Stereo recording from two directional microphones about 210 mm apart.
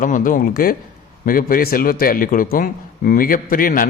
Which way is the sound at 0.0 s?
40° left (ahead or behind).